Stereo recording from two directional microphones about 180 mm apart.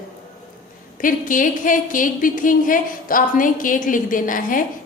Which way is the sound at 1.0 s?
45° left (ahead or behind).